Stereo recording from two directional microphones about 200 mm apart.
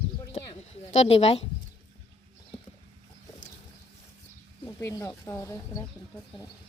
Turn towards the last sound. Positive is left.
turn(degrees=15)  # may be behind; listen again after turning